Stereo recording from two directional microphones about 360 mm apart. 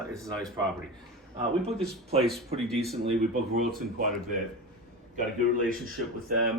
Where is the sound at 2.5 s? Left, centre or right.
Centre.